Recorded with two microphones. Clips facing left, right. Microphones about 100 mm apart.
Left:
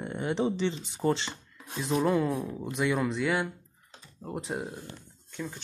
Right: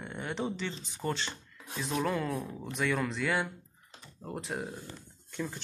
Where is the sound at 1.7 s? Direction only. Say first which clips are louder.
Left 5 dB; 10° left (ahead or behind).